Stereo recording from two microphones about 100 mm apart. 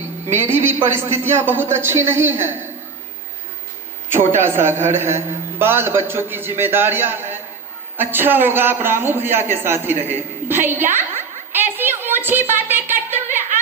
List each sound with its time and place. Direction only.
0.5 s a man's voice: 25° right (ahead or behind)
4.1 s a man's voice: 25° right (ahead or behind)
8.8 s a sound: 20° right (ahead or behind)